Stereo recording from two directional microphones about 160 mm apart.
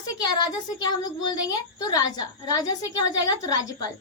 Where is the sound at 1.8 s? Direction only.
25° left (ahead or behind).